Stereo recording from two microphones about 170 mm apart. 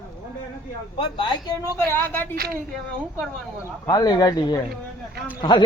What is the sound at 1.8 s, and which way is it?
Speech, 10° left (ahead or behind).